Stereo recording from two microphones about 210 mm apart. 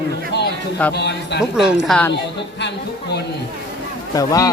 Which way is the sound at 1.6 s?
Centre (ahead or behind).